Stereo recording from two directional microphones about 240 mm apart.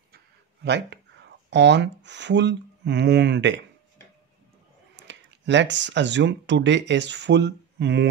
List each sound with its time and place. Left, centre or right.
0.7 s speech: right
4.9 s speech: right